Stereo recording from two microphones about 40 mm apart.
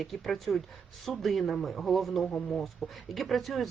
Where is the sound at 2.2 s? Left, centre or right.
Left.